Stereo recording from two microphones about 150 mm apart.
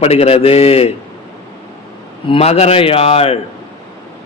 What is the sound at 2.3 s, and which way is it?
A man's voice, 45° left (ahead or behind).